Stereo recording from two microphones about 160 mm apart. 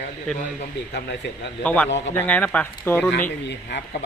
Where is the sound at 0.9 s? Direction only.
90° left.